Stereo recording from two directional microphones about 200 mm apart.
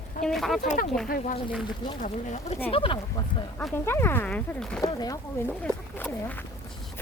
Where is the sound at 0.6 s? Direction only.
45° left (ahead or behind).